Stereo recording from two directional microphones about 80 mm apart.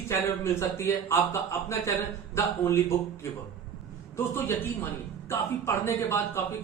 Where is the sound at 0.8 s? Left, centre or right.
Left.